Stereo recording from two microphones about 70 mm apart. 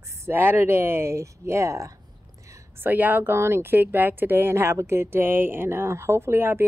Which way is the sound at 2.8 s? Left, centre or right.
Right.